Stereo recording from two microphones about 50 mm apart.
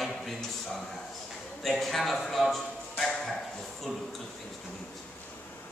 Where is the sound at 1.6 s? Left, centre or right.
Centre.